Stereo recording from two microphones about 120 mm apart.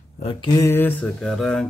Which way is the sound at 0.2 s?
50° left (ahead or behind).